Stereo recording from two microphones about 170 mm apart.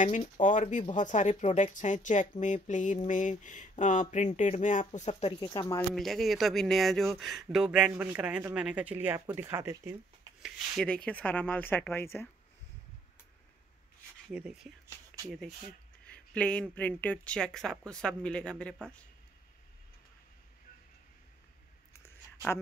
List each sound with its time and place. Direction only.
0.0 s mantra: 45° left (ahead or behind)
5.4 s speech: 25° left (ahead or behind)
5.9 s speech: centre (ahead or behind); by 9.9 s 15° right (ahead or behind)
10.4 s a woman's voice: 5° left (ahead or behind)
14.3 s speech: 5° right (ahead or behind)
16.1 s speech: 5° left (ahead or behind)
22.0 s a sound: 15° left (ahead or behind)